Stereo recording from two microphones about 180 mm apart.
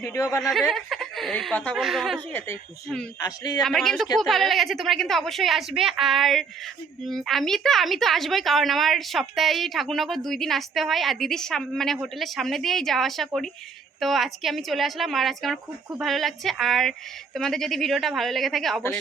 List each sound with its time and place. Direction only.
0.0 s speech: 15° left (ahead or behind)
0.7 s a woman's voice: centre (ahead or behind)
3.2 s speech: 20° left (ahead or behind)
3.6 s a woman's voice: 5° left (ahead or behind)